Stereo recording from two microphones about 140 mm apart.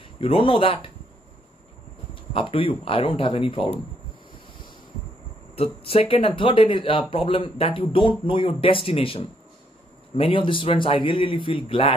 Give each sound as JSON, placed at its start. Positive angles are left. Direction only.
{"t": 0.2, "sound": "speech", "side_deg": 40}
{"t": 2.3, "sound": "speech", "side_deg": 40}
{"t": 5.6, "sound": "speech", "side_deg": 45}